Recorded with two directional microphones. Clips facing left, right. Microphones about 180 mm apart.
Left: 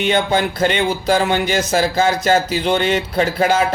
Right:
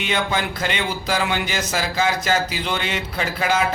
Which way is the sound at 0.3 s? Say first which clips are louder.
Left 7 dB; 30° left (ahead or behind).